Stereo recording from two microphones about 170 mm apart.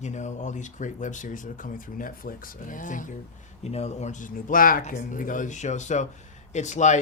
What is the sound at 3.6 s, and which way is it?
Speech, 40° left (ahead or behind).